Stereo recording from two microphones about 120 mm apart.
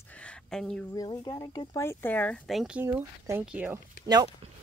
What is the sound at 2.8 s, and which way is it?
Speech, 20° right (ahead or behind).